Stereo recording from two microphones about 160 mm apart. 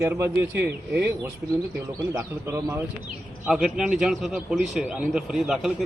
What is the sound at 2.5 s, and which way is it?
Speech, 15° right (ahead or behind).